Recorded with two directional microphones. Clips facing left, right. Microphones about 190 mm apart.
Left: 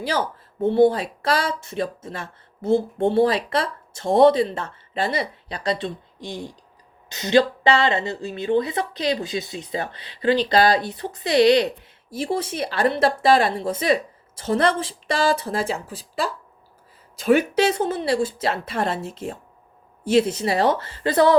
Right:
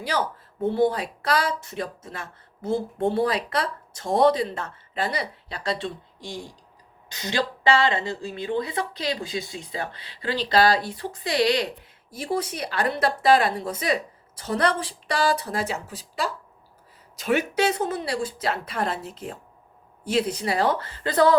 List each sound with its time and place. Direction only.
0.6 s speech: 25° left (ahead or behind)